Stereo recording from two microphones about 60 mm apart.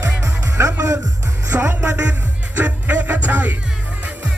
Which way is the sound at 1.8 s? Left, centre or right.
Right.